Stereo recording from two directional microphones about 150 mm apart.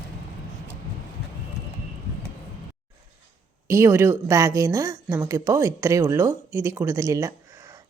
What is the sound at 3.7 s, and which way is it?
A woman's voice, 15° right (ahead or behind).